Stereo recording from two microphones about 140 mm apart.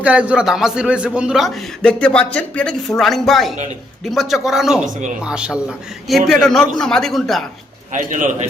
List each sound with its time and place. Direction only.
0.0 s a man's voice: 10° right (ahead or behind)
7.9 s a man's voice: 65° right (ahead or behind)